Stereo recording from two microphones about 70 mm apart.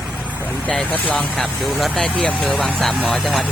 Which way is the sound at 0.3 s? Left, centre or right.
Right.